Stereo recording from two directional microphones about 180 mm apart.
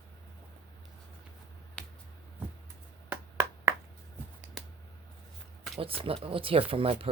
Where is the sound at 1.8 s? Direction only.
5° left (ahead or behind).